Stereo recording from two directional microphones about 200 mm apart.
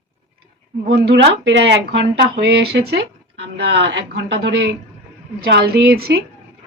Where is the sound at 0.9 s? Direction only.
60° right (ahead or behind).